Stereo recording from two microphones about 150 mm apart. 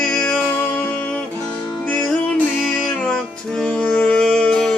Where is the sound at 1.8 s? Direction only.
10° left (ahead or behind).